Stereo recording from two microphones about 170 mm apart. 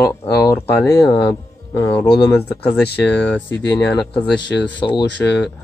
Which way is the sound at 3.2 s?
10° left (ahead or behind).